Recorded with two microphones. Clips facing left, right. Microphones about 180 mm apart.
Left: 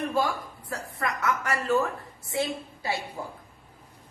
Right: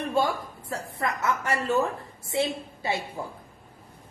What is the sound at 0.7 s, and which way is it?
A woman's voice, 25° right (ahead or behind).